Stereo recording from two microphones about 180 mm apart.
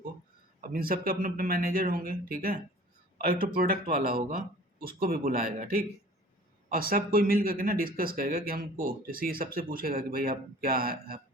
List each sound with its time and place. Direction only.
0.6 s speech: 55° right (ahead or behind)